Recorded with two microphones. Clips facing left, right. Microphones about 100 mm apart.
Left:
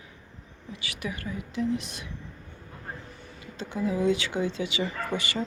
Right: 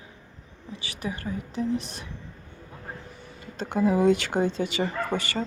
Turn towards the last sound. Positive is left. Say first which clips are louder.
# right 2 dB
turn(degrees=-45)  # may be behind; listen again after turning